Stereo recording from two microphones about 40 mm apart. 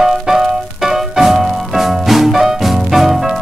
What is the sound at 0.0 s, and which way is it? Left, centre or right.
Music, centre.